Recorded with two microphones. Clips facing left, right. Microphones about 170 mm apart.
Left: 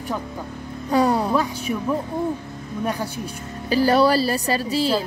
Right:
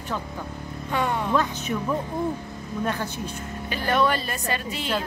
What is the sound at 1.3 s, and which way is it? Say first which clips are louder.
Speech: left 2 dB; 10° left (ahead or behind).